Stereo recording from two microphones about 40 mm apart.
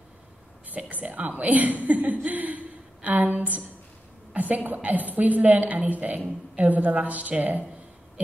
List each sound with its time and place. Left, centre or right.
0.7 s a woman's voice: right
2.2 s a sound: right
4.3 s a woman's voice: right